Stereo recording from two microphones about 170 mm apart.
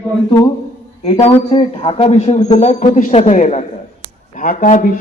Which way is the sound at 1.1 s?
30° left (ahead or behind).